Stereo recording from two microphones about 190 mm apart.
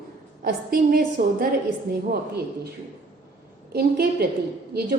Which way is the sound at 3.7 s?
55° right (ahead or behind).